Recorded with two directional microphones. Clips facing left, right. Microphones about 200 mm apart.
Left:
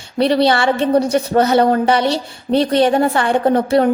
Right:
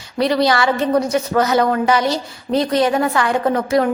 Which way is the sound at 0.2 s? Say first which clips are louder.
Left 2 dB; 30° left (ahead or behind).